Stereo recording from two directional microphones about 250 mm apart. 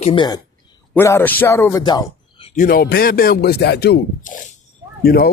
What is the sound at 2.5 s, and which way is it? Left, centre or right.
Speech, left.